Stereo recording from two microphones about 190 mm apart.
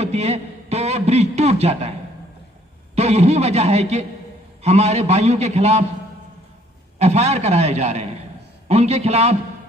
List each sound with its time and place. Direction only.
0.0 s a man's voice: 35° right (ahead or behind)
3.0 s a man's voice: 35° right (ahead or behind)
7.0 s a man's voice: 35° right (ahead or behind)